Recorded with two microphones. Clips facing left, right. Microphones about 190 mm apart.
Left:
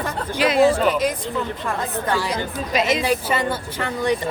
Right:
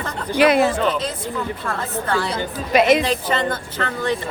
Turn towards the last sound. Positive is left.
turn(degrees=15)  # may be behind; listen again after turning